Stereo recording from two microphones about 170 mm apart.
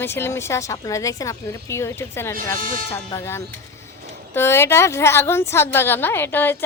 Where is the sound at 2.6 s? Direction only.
55° right (ahead or behind).